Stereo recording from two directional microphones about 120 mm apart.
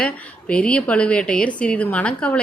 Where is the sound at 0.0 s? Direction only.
10° left (ahead or behind).